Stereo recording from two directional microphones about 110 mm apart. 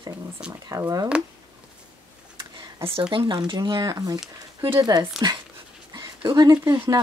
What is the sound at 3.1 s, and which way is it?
Speech, 50° right (ahead or behind).